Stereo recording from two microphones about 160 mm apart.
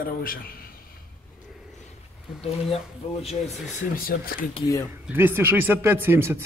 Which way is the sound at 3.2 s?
45° left (ahead or behind).